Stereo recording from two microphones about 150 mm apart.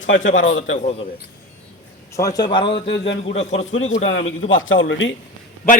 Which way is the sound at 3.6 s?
50° left (ahead or behind).